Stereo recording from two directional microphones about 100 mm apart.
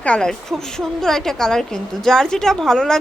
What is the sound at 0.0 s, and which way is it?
A woman's voice, 10° left (ahead or behind).